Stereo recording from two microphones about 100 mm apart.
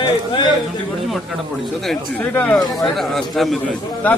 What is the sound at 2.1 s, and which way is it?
Speech, 15° left (ahead or behind).